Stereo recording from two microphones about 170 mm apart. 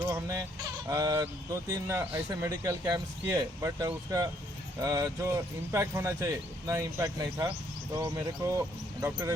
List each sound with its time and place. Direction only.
0.1 s speech: 20° right (ahead or behind)
8.4 s speech: 20° right (ahead or behind)